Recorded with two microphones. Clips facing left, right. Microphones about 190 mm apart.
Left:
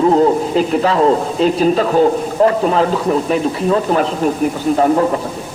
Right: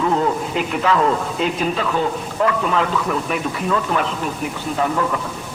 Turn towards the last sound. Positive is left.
turn(degrees=35)  # may be behind; listen again after turning